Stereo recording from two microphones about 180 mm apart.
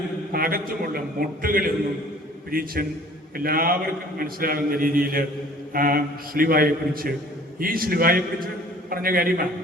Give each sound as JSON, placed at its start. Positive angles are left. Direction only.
{"t": 0.3, "sound": "a man's voice", "side_deg": -55}